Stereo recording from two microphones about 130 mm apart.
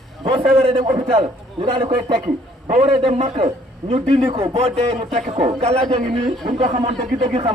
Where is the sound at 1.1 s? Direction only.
50° right (ahead or behind).